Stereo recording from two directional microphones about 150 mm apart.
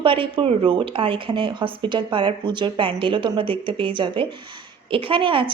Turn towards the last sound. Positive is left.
turn(degrees=-35)  # may be behind; listen again after turning